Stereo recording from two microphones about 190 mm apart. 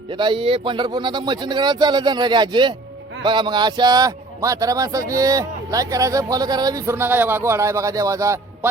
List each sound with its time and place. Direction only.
0.1 s speech: 25° right (ahead or behind)